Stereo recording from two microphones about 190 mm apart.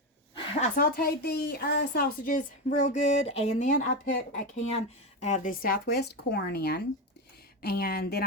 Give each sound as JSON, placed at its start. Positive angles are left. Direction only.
{"t": 0.8, "sound": "a woman's voice", "side_deg": 55}